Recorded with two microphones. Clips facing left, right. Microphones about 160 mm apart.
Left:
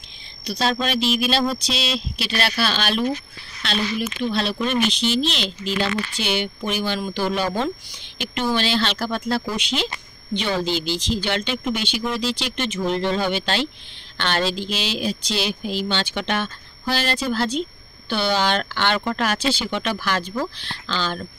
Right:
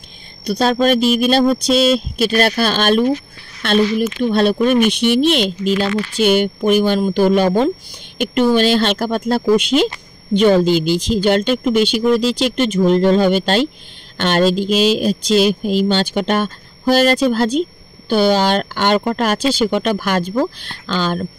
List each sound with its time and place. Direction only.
0.4 s speech: 50° right (ahead or behind)